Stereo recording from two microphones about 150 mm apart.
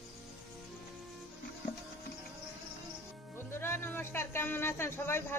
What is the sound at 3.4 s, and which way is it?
Speech, 15° left (ahead or behind).